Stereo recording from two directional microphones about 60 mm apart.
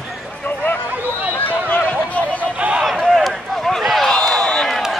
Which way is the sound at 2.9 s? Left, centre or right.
Centre.